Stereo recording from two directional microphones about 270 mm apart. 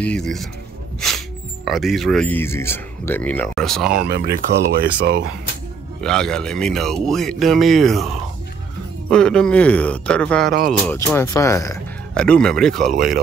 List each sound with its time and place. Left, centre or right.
0.0 s a man's voice: centre
4.1 s speech: right
5.9 s a man's voice: centre
9.1 s a man's voice: centre